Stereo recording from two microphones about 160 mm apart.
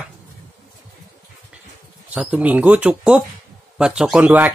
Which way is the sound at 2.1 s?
10° right (ahead or behind).